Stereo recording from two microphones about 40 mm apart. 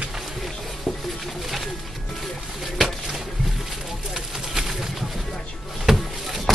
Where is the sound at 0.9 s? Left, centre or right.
Centre.